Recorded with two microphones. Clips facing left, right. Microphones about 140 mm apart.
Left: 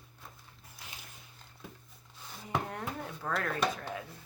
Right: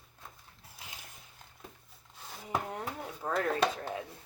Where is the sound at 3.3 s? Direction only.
25° right (ahead or behind).